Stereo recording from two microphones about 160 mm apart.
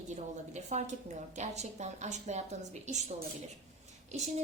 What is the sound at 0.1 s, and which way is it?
A woman's voice, 45° right (ahead or behind).